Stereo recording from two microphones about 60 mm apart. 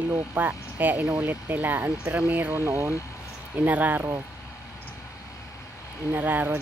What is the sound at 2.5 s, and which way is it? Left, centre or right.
Speech, right.